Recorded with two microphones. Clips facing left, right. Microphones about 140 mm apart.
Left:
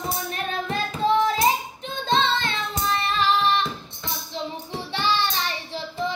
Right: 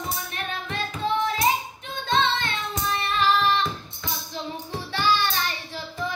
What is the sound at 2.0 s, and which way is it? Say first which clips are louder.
Child singing: left 1 dB; 30° left (ahead or behind).